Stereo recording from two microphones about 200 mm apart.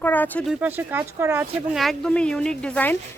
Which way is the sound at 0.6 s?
10° right (ahead or behind).